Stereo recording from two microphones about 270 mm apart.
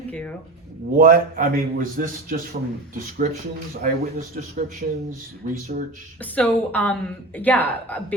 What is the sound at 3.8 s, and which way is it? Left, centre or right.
Speech, right.